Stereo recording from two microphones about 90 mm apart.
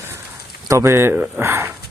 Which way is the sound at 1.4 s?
30° right (ahead or behind).